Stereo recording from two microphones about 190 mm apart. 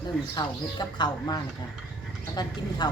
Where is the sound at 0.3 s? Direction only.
25° left (ahead or behind).